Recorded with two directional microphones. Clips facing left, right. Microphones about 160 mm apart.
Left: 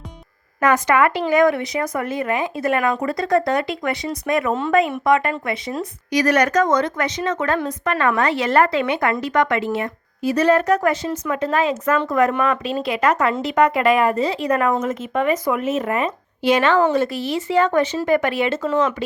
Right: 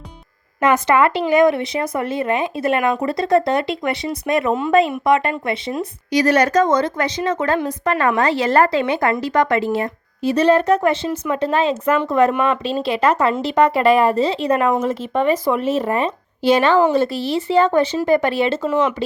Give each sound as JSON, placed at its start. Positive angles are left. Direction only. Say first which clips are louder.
{"t": 0.6, "sound": "speech", "louder": "right 1 dB", "side_deg": -25}